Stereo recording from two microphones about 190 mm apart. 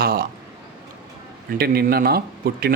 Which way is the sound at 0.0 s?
50° right (ahead or behind).